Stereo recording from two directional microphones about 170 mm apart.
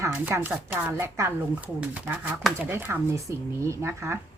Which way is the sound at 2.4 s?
10° right (ahead or behind).